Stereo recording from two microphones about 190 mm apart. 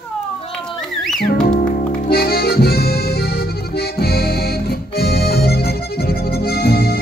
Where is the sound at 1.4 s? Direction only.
50° left (ahead or behind).